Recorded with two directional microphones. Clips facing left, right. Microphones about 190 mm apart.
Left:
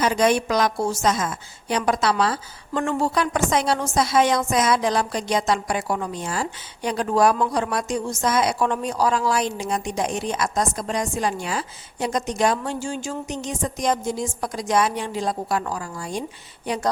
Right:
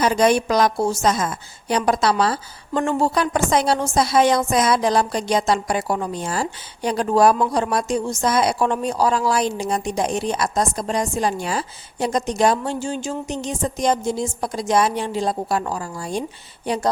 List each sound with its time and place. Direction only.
0.0 s speech: 35° right (ahead or behind)